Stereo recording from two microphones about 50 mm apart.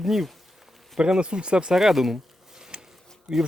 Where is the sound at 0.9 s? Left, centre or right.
Centre.